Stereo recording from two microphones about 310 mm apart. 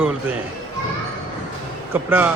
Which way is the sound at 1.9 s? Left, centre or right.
Centre.